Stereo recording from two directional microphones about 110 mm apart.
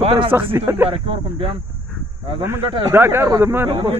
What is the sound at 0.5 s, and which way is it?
Speech, 20° right (ahead or behind).